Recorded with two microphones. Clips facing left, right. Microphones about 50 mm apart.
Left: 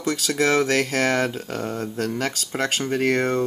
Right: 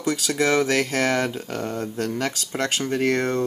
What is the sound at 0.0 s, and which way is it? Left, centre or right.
Speech, centre.